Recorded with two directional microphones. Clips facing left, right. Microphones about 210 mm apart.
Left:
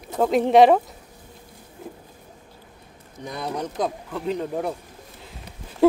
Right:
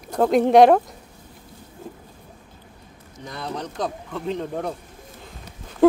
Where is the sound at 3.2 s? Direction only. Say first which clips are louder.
Left 2 dB; 10° left (ahead or behind).